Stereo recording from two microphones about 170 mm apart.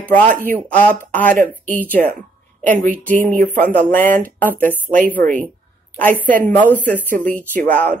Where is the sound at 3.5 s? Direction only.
10° left (ahead or behind).